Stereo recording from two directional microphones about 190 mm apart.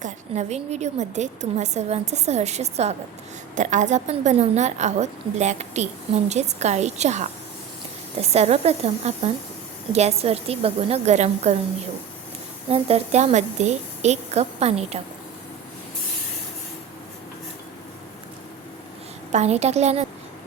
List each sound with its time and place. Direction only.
0.0 s a woman's voice: 35° right (ahead or behind)
12.7 s a woman's voice: 35° right (ahead or behind)
19.3 s a woman's voice: 35° right (ahead or behind)